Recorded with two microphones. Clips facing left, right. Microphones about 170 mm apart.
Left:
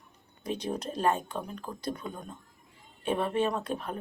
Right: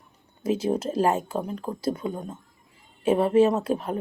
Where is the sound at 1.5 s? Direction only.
25° right (ahead or behind).